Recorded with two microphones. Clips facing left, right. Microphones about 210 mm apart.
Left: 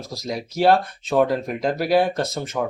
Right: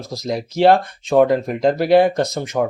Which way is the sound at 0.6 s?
20° right (ahead or behind).